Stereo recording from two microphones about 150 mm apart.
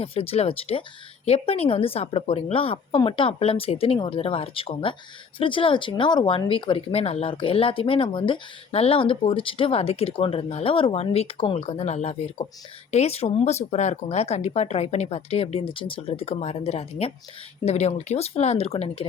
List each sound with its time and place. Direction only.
0.0 s speech: 40° left (ahead or behind)